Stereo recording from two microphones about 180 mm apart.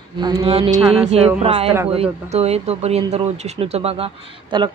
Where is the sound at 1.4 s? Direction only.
30° right (ahead or behind).